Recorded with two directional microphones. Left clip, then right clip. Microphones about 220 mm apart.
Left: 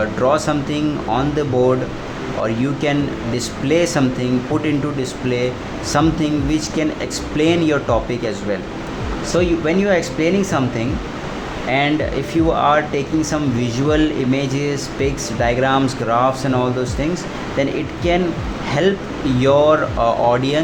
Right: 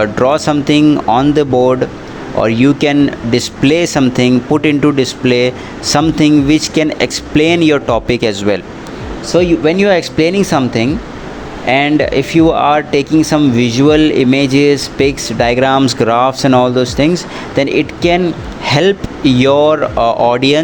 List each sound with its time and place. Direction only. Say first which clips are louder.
0.0 s speech: right 5 dB; 40° right (ahead or behind)